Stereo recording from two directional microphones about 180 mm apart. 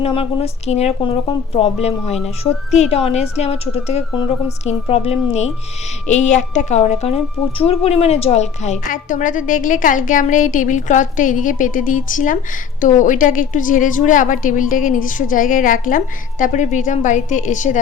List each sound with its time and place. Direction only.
0.0 s a woman's voice: 30° left (ahead or behind)